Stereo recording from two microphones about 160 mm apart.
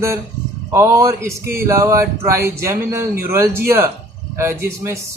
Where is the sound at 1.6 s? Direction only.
20° right (ahead or behind).